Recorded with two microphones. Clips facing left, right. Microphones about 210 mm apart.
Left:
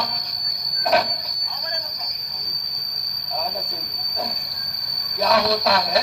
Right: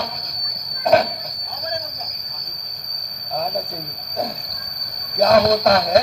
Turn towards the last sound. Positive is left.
turn(degrees=-50)  # may be behind; listen again after turning